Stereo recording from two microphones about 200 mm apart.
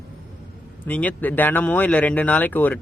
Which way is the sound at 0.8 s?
10° left (ahead or behind).